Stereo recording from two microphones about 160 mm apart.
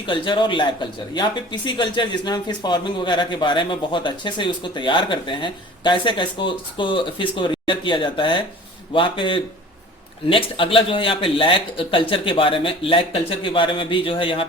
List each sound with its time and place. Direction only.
0.0 s a man's voice: 30° left (ahead or behind)